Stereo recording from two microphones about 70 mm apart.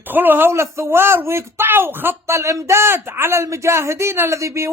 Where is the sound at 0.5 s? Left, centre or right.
Right.